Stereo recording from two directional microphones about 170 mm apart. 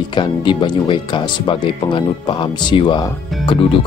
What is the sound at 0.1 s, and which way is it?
Speech, 30° left (ahead or behind).